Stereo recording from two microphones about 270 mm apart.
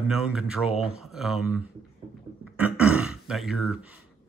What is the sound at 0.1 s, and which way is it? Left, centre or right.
Speech, centre.